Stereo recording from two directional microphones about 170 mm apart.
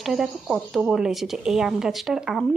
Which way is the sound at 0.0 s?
Centre (ahead or behind).